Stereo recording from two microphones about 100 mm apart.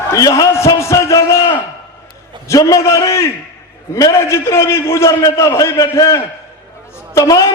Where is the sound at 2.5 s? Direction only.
30° left (ahead or behind).